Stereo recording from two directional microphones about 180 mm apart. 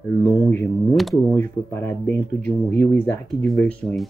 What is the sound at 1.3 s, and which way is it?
Speech, 15° left (ahead or behind).